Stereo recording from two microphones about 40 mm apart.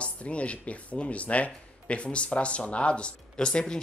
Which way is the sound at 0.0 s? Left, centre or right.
Left.